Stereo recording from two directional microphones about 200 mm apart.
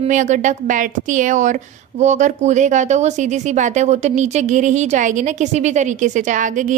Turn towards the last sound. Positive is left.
turn(degrees=-40)  # may be behind; listen again after turning